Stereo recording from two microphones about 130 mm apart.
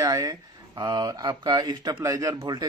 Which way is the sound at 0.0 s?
25° right (ahead or behind).